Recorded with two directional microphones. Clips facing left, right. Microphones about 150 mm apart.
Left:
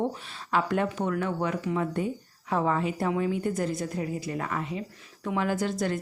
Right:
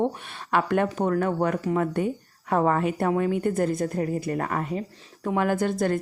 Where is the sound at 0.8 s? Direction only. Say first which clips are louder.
Right 5 dB; 40° right (ahead or behind).